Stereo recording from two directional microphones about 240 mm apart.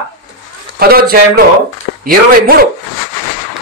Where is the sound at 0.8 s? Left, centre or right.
Right.